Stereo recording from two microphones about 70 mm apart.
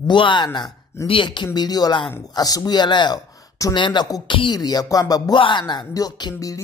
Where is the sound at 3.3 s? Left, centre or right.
Left.